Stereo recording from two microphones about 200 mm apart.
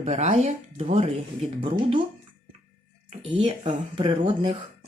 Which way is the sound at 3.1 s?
35° right (ahead or behind).